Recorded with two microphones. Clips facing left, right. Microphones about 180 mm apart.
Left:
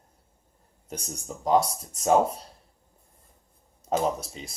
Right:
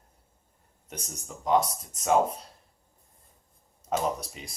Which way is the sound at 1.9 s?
35° left (ahead or behind).